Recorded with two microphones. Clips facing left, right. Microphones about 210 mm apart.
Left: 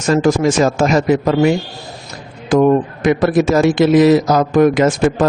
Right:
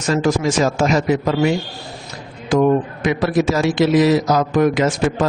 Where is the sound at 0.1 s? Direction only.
50° left (ahead or behind).